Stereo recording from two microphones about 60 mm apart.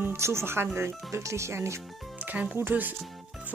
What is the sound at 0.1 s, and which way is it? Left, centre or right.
Speech, right.